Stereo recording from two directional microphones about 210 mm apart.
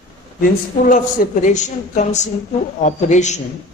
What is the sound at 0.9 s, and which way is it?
A man's voice, 35° left (ahead or behind).